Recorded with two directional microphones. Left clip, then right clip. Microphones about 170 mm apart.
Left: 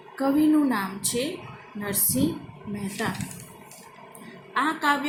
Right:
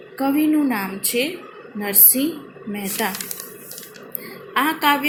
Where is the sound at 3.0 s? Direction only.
20° right (ahead or behind).